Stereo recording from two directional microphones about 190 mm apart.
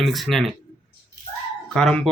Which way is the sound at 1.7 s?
5° left (ahead or behind).